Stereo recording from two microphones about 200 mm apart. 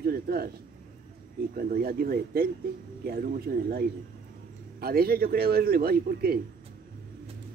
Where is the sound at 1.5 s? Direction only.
50° right (ahead or behind).